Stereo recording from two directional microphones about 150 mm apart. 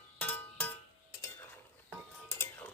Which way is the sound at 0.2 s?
10° left (ahead or behind).